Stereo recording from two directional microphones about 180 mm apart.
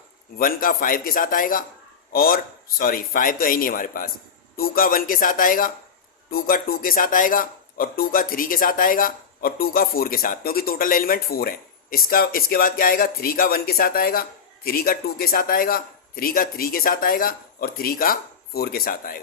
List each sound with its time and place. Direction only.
0.3 s speech: 55° left (ahead or behind)